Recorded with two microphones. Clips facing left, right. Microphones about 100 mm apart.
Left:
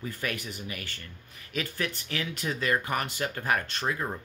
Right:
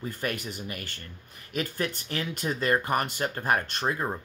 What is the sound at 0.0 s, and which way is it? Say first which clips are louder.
Speech: right 2 dB; 40° right (ahead or behind).